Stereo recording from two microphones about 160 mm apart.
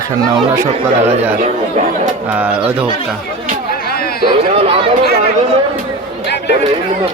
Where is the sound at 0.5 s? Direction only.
15° right (ahead or behind).